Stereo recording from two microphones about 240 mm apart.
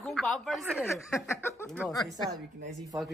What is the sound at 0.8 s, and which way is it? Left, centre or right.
Speech, centre.